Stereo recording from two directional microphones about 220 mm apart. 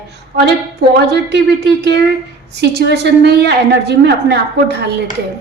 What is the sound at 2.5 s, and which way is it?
A woman's voice, 50° right (ahead or behind).